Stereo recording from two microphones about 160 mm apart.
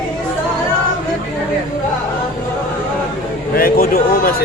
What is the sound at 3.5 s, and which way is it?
Speech, 70° left (ahead or behind).